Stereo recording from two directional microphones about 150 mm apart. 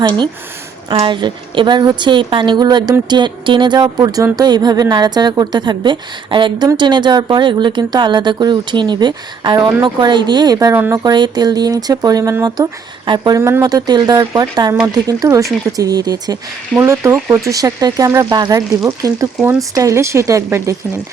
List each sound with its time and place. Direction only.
0.0 s a woman's voice: 30° right (ahead or behind)
11.0 s a woman's voice: 30° right (ahead or behind)